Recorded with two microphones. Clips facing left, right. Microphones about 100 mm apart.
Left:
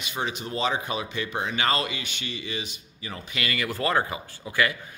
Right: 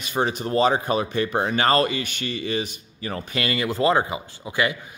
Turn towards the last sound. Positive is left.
turn(degrees=-20)  # may be behind; listen again after turning